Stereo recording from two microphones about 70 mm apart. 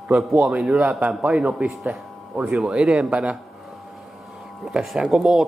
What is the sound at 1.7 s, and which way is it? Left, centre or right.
Speech, centre.